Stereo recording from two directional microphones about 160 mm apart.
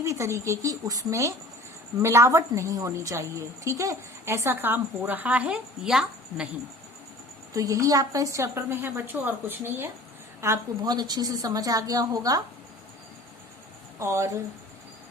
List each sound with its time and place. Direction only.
0.0 s a woman's voice: 20° right (ahead or behind)
7.5 s a woman's voice: 20° right (ahead or behind)
14.0 s a woman's voice: 15° right (ahead or behind)